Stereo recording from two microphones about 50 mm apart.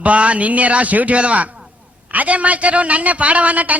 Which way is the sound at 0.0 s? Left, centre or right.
Right.